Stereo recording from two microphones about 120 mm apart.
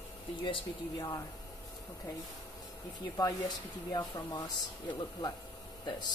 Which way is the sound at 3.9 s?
30° left (ahead or behind).